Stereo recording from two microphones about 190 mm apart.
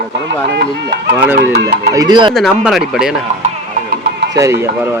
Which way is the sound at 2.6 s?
Centre (ahead or behind).